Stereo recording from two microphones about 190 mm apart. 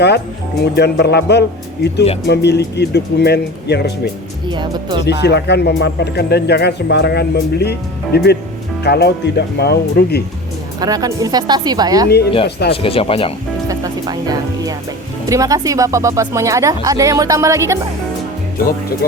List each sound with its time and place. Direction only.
0.6 s speech: 60° left (ahead or behind)
4.5 s speech: 25° right (ahead or behind)
5.0 s speech: 60° left (ahead or behind)
10.8 s speech: 20° right (ahead or behind)
12.0 s speech: 60° left (ahead or behind)
12.7 s speech: 30° left (ahead or behind)
13.7 s speech: 20° right (ahead or behind)